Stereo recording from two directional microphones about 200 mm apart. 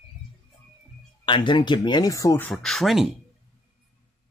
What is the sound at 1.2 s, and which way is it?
Speech, 25° left (ahead or behind).